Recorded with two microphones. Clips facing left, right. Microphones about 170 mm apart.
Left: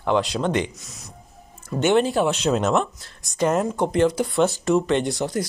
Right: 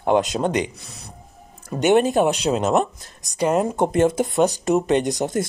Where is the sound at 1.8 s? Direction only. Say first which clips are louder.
Right 2 dB; 15° right (ahead or behind).